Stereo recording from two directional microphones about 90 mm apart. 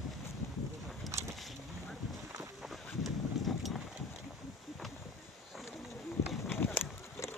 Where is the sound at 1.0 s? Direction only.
Centre (ahead or behind).